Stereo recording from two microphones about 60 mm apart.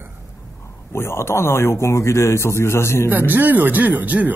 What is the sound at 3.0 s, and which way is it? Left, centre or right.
Speech, right.